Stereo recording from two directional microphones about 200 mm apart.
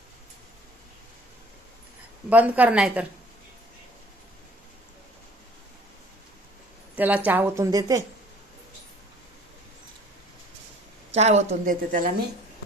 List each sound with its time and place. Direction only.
2.3 s a woman's voice: 5° right (ahead or behind)
6.9 s a woman's voice: 10° right (ahead or behind)
11.1 s a woman's voice: 35° right (ahead or behind)